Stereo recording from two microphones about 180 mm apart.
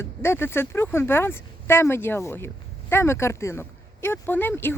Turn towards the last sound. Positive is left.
turn(degrees=10)  # may be behind; listen again after turning